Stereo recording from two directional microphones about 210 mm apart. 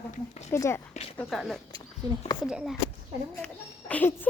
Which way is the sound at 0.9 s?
30° left (ahead or behind).